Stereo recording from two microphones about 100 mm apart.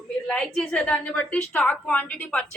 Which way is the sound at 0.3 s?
5° left (ahead or behind).